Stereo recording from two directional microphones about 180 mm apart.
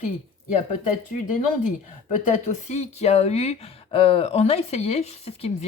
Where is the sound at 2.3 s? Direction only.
40° left (ahead or behind).